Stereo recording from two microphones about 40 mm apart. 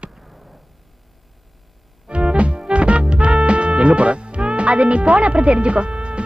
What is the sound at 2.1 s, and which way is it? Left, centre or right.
Music, right.